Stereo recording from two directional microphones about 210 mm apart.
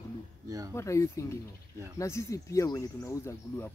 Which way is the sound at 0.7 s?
15° left (ahead or behind).